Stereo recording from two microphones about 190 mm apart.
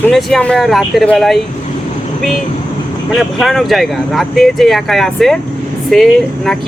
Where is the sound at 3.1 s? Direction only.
Centre (ahead or behind).